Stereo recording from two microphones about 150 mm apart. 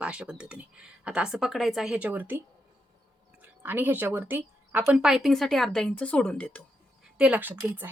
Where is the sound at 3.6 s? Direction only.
15° right (ahead or behind); by 6.6 s 5° left (ahead or behind).